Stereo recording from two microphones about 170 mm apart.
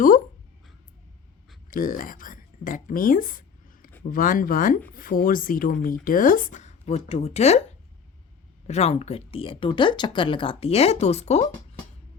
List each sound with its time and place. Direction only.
1.7 s speech: 55° left (ahead or behind)
8.6 s speech: 40° left (ahead or behind)